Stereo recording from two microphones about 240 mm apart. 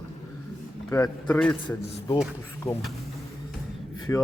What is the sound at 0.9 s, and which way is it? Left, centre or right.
Speech, centre.